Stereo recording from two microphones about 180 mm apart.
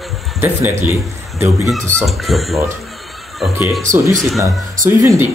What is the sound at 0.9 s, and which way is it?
Speech, 15° right (ahead or behind).